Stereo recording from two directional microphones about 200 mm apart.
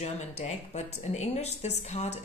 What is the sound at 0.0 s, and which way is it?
A woman's voice, 35° left (ahead or behind).